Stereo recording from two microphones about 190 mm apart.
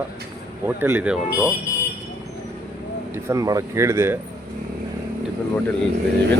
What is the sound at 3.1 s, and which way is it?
Speech, 15° right (ahead or behind).